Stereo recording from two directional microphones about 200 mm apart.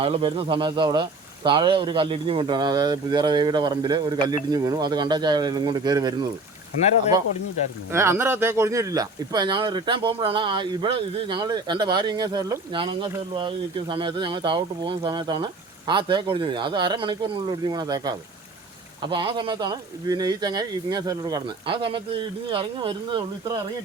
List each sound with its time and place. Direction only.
0.0 s speech: 30° right (ahead or behind)
7.9 s speech: 15° right (ahead or behind)